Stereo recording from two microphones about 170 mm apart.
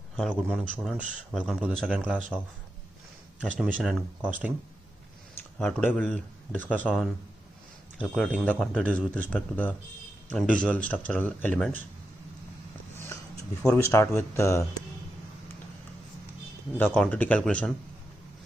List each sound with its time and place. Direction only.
0.1 s a sound: centre (ahead or behind)
0.8 s speech: 5° right (ahead or behind)
3.5 s speech: 5° right (ahead or behind)
5.4 s speech: 10° left (ahead or behind)
8.0 s speech: 5° left (ahead or behind)
13.0 s speech: 15° left (ahead or behind)
16.7 s speech: 10° left (ahead or behind)